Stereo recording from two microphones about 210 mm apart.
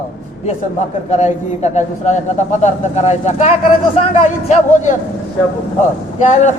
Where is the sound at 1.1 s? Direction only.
35° left (ahead or behind).